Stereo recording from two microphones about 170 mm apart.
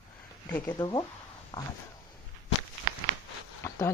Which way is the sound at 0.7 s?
25° left (ahead or behind).